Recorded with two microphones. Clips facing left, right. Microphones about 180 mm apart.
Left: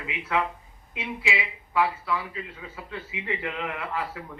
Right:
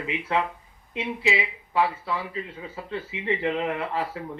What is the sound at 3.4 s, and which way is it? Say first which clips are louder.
Speech: right 6 dB; 25° right (ahead or behind).